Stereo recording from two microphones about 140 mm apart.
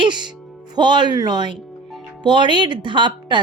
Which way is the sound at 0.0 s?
30° right (ahead or behind).